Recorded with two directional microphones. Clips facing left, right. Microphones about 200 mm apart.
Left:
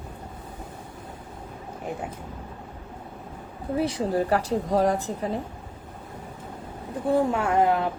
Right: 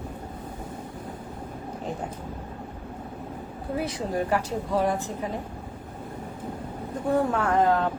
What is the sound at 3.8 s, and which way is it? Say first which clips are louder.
Speech: left 4 dB; 30° left (ahead or behind).